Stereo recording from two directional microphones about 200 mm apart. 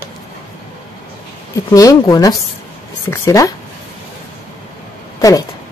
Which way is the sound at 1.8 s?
20° left (ahead or behind).